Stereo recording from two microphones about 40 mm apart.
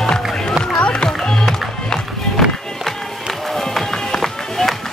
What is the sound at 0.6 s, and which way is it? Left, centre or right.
Run, left.